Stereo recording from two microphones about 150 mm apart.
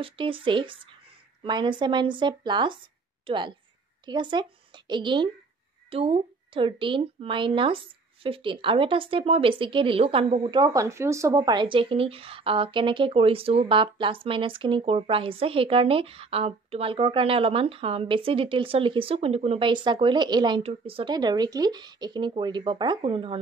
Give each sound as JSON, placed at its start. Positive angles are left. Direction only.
{"t": 0.0, "sound": "a woman's voice", "side_deg": -35}